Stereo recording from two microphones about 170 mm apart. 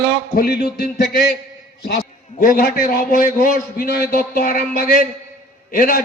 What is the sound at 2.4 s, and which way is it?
A man's voice, 55° left (ahead or behind).